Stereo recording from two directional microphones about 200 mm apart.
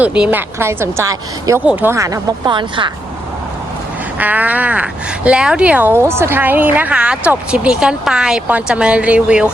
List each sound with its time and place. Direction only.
0.0 s speech: 5° right (ahead or behind); by 2.9 s 25° right (ahead or behind)
4.2 s speech: 10° right (ahead or behind)